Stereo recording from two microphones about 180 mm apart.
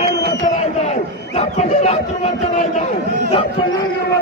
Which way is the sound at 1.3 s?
35° left (ahead or behind).